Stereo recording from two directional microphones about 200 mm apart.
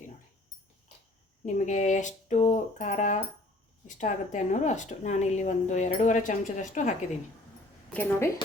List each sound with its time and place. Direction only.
1.5 s speech: 35° left (ahead or behind)
7.9 s speech: 10° left (ahead or behind)